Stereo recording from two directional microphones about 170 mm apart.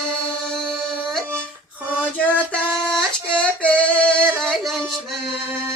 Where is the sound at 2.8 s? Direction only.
5° left (ahead or behind).